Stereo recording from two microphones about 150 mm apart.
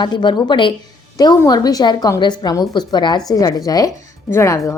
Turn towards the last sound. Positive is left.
turn(degrees=20)  # may be behind; listen again after turning